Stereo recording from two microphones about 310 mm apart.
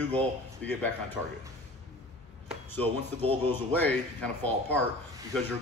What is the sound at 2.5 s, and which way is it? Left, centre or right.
Speech, centre.